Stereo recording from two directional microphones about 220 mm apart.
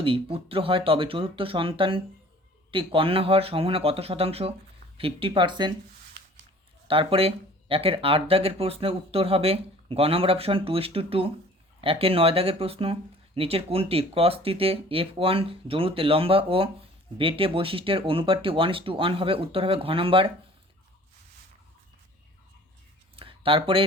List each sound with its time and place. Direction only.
0.0 s speech: 25° right (ahead or behind)
6.8 s speech: 25° right (ahead or behind)
23.1 s a sound: 25° right (ahead or behind)